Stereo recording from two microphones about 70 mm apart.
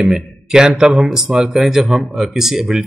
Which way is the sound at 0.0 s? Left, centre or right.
Centre.